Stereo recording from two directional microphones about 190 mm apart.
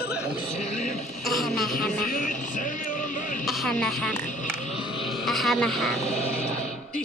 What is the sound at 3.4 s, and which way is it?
Speech, centre (ahead or behind).